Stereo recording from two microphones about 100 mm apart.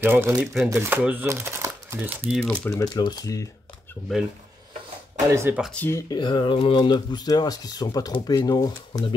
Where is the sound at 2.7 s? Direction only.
40° left (ahead or behind).